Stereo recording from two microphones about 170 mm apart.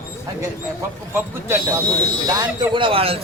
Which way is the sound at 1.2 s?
15° right (ahead or behind).